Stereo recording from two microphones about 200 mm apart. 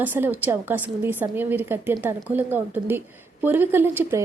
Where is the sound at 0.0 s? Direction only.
10° right (ahead or behind).